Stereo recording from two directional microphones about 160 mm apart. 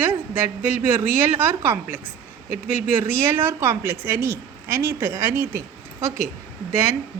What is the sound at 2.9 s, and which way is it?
A woman's voice, 15° right (ahead or behind).